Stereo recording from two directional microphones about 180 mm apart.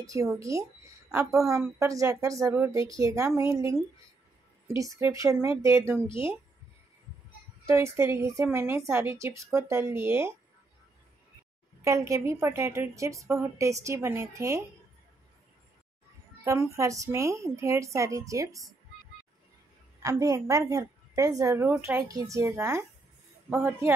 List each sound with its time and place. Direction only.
0.0 s a woman's voice: 20° right (ahead or behind)
7.6 s a woman's voice: 15° right (ahead or behind)
11.8 s a woman's voice: 15° right (ahead or behind)
16.4 s a woman's voice: 15° right (ahead or behind)
20.0 s a woman's voice: 20° right (ahead or behind)